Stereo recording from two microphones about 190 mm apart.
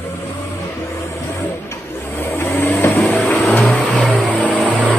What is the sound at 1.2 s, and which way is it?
Vehicle, 15° left (ahead or behind).